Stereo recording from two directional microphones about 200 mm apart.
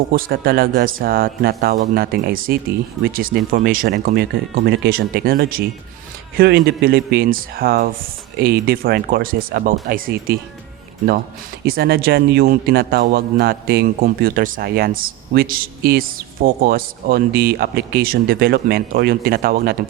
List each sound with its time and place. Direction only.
0.1 s a man's voice: 50° right (ahead or behind)
11.6 s a man's voice: 50° right (ahead or behind)